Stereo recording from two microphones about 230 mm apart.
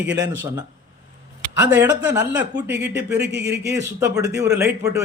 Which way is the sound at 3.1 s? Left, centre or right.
Right.